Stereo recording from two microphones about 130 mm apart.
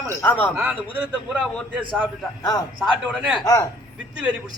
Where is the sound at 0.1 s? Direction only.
15° left (ahead or behind).